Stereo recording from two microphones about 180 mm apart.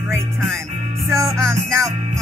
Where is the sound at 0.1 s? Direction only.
15° right (ahead or behind).